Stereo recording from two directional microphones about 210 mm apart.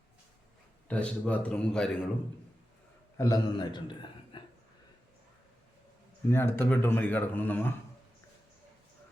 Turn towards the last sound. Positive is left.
turn(degrees=10)  # may be behind; listen again after turning